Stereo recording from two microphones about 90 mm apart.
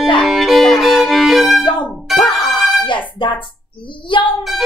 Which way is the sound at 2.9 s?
65° left (ahead or behind).